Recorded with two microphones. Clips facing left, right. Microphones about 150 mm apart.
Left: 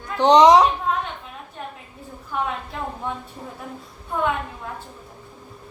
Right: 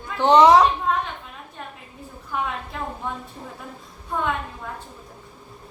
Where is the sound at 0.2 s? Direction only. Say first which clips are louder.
Left 1 dB; 15° left (ahead or behind).